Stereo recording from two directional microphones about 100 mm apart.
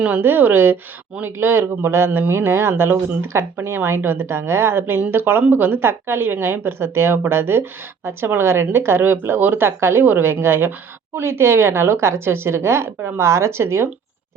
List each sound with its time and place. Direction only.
0.0 s a woman's voice: 20° right (ahead or behind)